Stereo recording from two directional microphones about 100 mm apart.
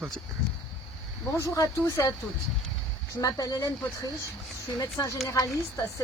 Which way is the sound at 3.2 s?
35° left (ahead or behind).